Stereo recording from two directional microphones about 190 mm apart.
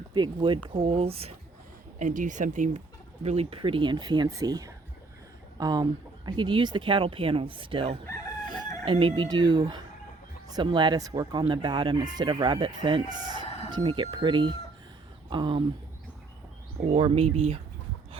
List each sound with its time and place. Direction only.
0.1 s speech: 25° right (ahead or behind); by 2.8 s 40° right (ahead or behind)
3.2 s speech: 30° right (ahead or behind)
16.9 s speech: 30° right (ahead or behind)